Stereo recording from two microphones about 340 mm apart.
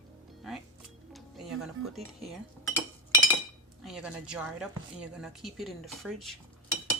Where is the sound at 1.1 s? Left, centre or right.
Centre.